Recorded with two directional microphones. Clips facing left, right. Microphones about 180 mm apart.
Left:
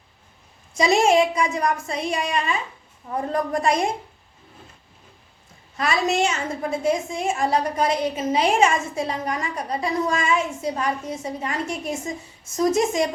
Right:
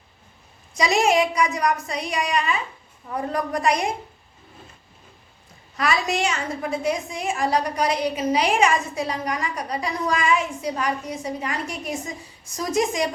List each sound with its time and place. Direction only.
0.7 s a woman's voice: 25° left (ahead or behind)
5.7 s a woman's voice: 25° left (ahead or behind)